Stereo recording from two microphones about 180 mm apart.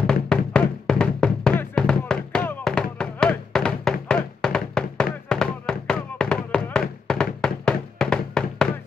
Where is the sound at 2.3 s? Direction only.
10° left (ahead or behind).